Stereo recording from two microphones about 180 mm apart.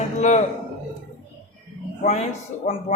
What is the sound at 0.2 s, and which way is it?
Speech, 40° left (ahead or behind).